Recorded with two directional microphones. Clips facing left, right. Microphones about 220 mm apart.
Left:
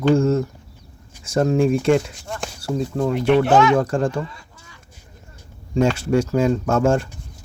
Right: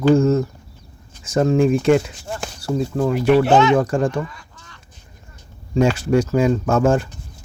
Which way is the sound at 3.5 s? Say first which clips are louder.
Right 1 dB; 25° right (ahead or behind).